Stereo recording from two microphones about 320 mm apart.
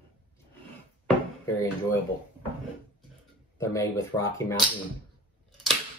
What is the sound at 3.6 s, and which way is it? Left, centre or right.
Speech, centre.